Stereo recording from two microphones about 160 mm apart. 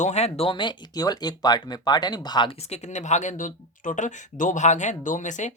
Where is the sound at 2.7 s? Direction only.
45° left (ahead or behind).